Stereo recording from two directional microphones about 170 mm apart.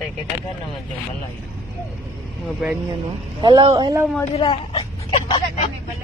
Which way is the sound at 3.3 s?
25° right (ahead or behind).